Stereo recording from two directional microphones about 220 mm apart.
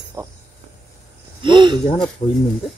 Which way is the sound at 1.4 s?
20° right (ahead or behind).